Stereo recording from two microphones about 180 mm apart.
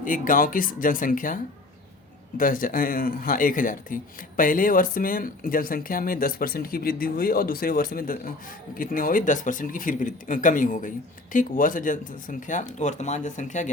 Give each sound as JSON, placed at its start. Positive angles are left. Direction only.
{"t": 0.0, "sound": "speech", "side_deg": 50}
{"t": 2.4, "sound": "speech", "side_deg": 50}